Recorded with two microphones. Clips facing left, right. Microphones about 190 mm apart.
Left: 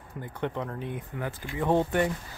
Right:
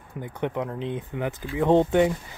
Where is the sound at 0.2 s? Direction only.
15° right (ahead or behind).